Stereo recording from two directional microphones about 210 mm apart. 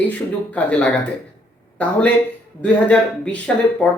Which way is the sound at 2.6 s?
5° left (ahead or behind).